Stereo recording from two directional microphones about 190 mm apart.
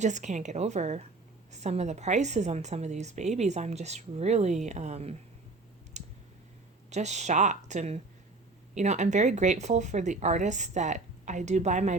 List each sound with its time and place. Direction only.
0.0 s a woman's voice: 40° right (ahead or behind)
6.0 s clicking: 35° right (ahead or behind)
6.9 s a woman's voice: 35° right (ahead or behind)